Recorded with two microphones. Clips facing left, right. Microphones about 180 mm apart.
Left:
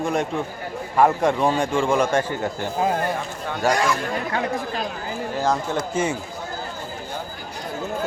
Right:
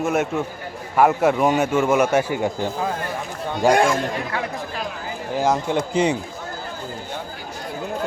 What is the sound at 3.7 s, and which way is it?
Speech, 50° right (ahead or behind).